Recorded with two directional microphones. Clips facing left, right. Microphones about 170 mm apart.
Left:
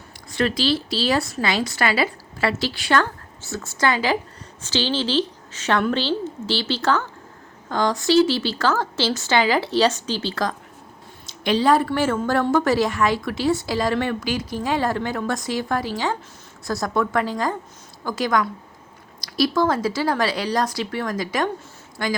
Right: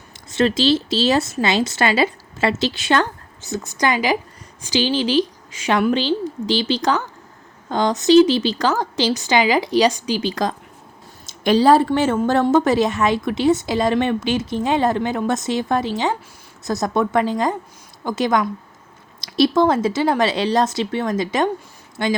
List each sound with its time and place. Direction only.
0.3 s a woman's voice: 25° right (ahead or behind)
11.3 s a woman's voice: 45° right (ahead or behind); by 22.1 s 25° right (ahead or behind)